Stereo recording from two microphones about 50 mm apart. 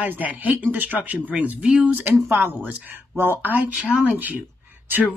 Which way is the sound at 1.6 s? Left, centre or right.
Centre.